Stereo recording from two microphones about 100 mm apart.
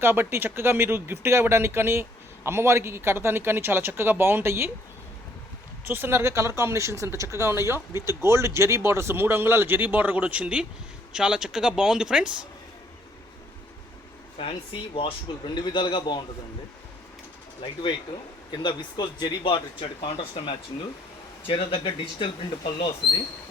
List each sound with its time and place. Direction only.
0.0 s speech: 25° right (ahead or behind)
5.9 s speech: 25° right (ahead or behind); by 12.5 s 10° right (ahead or behind)
14.3 s speech: 65° left (ahead or behind)
15.4 s speech: 50° left (ahead or behind)
18.5 s speech: 50° left (ahead or behind)
19.4 s speech: 60° left (ahead or behind)